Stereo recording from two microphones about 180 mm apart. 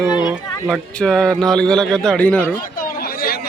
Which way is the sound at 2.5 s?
50° left (ahead or behind).